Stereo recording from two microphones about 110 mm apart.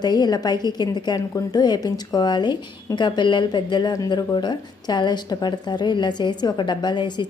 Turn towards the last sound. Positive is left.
turn(degrees=45)  # may be behind; listen again after turning